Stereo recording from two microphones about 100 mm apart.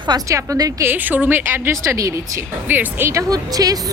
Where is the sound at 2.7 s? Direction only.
20° right (ahead or behind); by 3.8 s 40° right (ahead or behind).